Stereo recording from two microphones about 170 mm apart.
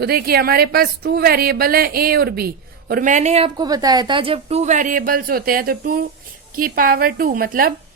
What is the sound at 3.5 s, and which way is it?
A woman's voice, 25° right (ahead or behind).